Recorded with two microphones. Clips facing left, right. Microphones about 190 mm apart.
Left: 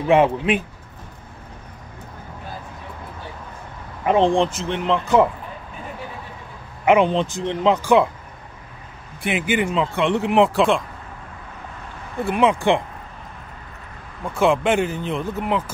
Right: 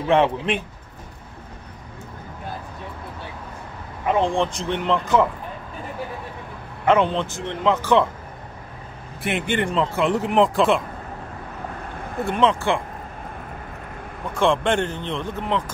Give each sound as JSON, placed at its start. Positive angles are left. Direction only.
{"t": 0.1, "sound": "speech", "side_deg": 10}
{"t": 4.2, "sound": "speech", "side_deg": 15}
{"t": 4.5, "sound": "speech", "side_deg": 0}
{"t": 6.9, "sound": "speech", "side_deg": 15}
{"t": 9.2, "sound": "speech", "side_deg": 0}
{"t": 12.2, "sound": "speech", "side_deg": 5}
{"t": 14.3, "sound": "speech", "side_deg": 5}